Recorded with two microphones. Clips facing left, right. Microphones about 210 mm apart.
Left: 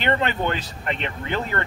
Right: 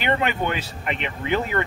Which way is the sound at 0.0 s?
10° right (ahead or behind).